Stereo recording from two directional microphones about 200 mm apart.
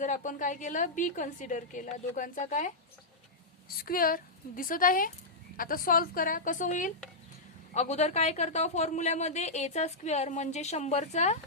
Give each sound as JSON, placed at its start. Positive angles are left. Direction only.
{"t": 0.0, "sound": "speech", "side_deg": 40}
{"t": 3.8, "sound": "a woman's voice", "side_deg": 45}